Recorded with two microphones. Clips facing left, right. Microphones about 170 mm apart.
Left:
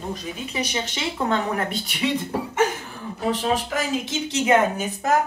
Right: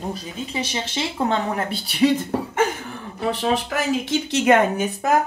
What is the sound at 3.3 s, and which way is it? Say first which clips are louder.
A woman's voice: right 1 dB; 65° right (ahead or behind).